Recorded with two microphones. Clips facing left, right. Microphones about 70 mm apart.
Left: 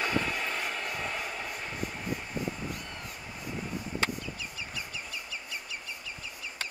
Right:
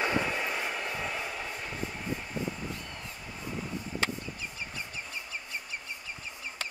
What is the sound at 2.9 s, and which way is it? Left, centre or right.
Train, left.